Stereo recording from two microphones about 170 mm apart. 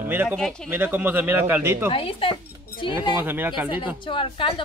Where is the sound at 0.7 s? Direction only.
10° right (ahead or behind).